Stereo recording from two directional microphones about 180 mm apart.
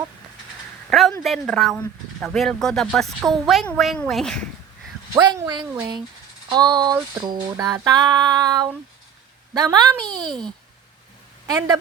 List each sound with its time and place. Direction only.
0.9 s a sound: centre (ahead or behind)
1.2 s speech: centre (ahead or behind)
5.2 s female singing: 25° right (ahead or behind)
11.4 s female singing: 20° right (ahead or behind)